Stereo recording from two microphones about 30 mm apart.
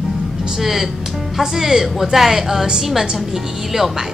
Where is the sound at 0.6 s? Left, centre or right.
Centre.